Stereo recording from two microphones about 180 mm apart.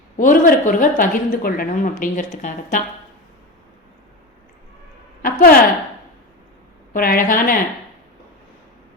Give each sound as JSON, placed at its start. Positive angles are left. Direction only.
{"t": 0.2, "sound": "a woman's voice", "side_deg": 50}
{"t": 5.2, "sound": "a woman's voice", "side_deg": 55}
{"t": 6.9, "sound": "a woman's voice", "side_deg": 50}